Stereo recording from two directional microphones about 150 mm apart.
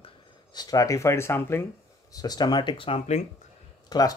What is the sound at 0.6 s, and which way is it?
Speech, 25° left (ahead or behind).